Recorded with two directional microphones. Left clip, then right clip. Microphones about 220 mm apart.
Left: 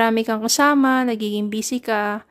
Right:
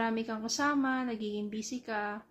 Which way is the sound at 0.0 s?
50° left (ahead or behind).